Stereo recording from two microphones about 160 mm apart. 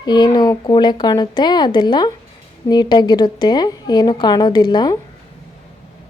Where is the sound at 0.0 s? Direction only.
25° left (ahead or behind).